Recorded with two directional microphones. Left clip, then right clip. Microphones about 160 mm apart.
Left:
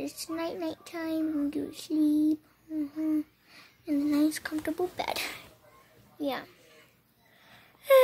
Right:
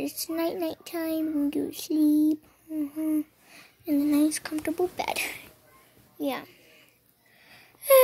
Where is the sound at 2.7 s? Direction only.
10° right (ahead or behind).